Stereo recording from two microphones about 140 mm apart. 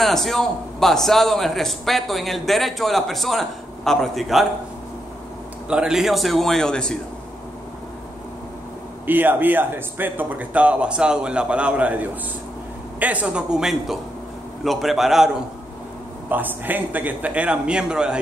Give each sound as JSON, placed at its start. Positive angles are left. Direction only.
{"t": 0.0, "sound": "a man's voice", "side_deg": 0}
{"t": 5.7, "sound": "a man's voice", "side_deg": -5}
{"t": 9.0, "sound": "a man's voice", "side_deg": -15}
{"t": 16.3, "sound": "speech", "side_deg": -15}